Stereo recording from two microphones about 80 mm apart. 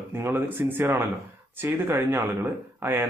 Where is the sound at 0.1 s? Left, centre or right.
Right.